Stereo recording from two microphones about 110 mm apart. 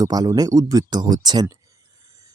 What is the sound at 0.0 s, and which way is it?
Speech, 35° right (ahead or behind).